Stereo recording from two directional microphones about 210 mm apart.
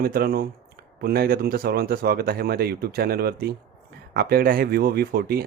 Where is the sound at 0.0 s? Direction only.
45° right (ahead or behind).